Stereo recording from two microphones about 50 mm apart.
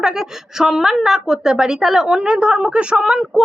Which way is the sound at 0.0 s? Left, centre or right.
Centre.